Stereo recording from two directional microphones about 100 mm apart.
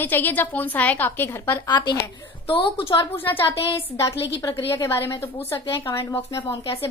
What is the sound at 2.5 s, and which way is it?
Speech, 60° left (ahead or behind).